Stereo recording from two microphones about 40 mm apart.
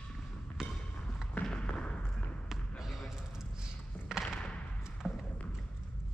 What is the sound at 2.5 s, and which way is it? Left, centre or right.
Basketball bounce, centre.